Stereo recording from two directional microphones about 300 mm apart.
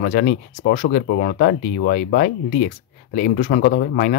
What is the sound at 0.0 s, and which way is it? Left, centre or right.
Speech, left.